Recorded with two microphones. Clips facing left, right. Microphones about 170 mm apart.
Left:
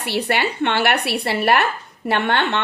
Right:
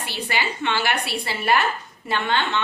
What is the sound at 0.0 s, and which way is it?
A woman's voice, 65° left (ahead or behind).